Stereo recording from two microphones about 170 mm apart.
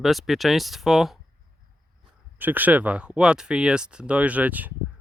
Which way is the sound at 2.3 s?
10° right (ahead or behind).